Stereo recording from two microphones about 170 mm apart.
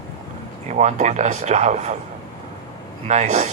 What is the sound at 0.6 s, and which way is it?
Speech, 45° right (ahead or behind).